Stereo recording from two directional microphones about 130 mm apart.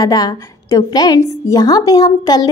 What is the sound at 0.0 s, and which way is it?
A woman's voice, 30° left (ahead or behind).